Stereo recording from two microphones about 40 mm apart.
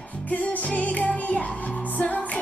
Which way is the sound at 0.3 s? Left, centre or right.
Left.